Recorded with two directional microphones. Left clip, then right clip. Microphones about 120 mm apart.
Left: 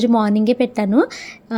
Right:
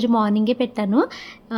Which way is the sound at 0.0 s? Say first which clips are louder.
Left 3 dB; 30° left (ahead or behind).